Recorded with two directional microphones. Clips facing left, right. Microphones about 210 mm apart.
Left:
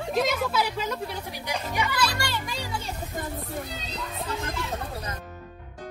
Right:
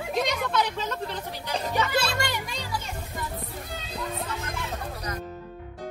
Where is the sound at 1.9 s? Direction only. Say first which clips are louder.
Right 1 dB; 25° right (ahead or behind).